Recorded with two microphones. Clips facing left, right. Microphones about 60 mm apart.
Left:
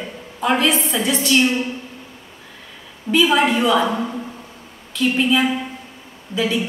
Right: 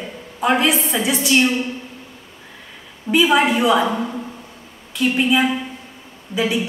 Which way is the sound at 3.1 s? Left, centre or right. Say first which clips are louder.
Right 1 dB; centre.